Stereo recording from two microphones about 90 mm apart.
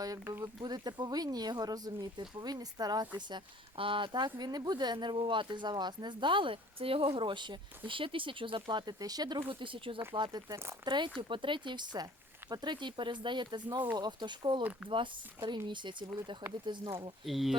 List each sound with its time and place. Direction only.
0.4 s speech: 50° right (ahead or behind)
3.2 s speech: 65° right (ahead or behind)
8.9 s speech: 45° right (ahead or behind)
9.4 s speech: 70° right (ahead or behind)
10.2 s speech: 60° right (ahead or behind)
17.2 s speech: centre (ahead or behind)